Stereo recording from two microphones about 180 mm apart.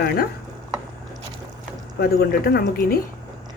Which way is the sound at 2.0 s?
60° left (ahead or behind).